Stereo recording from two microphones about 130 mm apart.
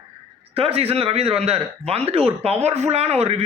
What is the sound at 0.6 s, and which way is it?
A man's voice, 50° right (ahead or behind).